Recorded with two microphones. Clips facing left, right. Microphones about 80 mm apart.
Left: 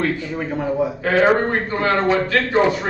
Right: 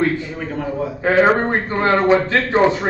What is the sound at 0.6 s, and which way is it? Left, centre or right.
Speech, centre.